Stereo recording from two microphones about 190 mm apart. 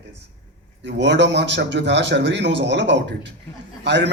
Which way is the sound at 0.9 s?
65° right (ahead or behind).